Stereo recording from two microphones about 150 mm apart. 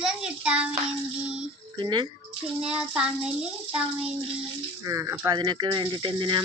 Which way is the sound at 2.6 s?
5° right (ahead or behind).